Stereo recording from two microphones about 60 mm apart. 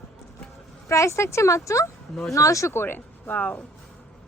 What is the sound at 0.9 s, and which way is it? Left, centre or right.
Speech, left.